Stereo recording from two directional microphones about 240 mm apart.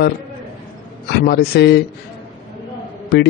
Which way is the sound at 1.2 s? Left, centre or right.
Left.